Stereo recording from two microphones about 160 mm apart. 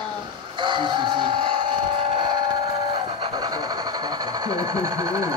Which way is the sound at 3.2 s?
25° right (ahead or behind).